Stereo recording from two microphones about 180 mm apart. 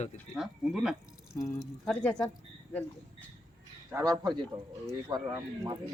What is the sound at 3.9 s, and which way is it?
Speech, 20° right (ahead or behind).